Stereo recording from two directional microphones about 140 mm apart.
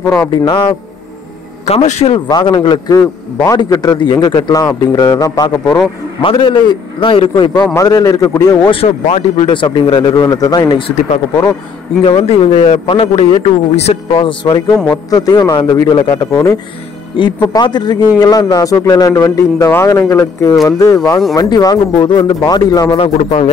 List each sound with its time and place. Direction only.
0.1 s a man's voice: 30° left (ahead or behind)
1.7 s a man's voice: 50° left (ahead or behind)
2.2 s a man's voice: 30° left (ahead or behind)
7.7 s a man's voice: 25° left (ahead or behind)
8.7 s a man's voice: 40° left (ahead or behind)
12.0 s a man's voice: 40° left (ahead or behind)
22.9 s a man's voice: 50° left (ahead or behind)